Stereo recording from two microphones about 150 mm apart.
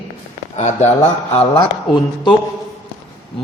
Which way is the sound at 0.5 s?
50° left (ahead or behind).